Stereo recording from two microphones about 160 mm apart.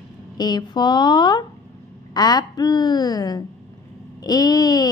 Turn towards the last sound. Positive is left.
turn(degrees=25)  # may be behind; listen again after turning